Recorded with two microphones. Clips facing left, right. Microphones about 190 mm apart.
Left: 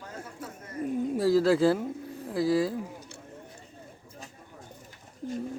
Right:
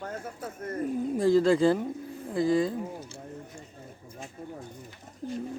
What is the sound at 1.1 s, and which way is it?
Speech, 5° left (ahead or behind).